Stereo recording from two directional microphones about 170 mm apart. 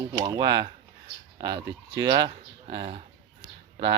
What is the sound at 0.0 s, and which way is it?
Speech, 20° right (ahead or behind).